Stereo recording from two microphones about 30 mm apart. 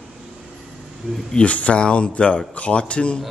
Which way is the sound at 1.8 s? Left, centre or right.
Left.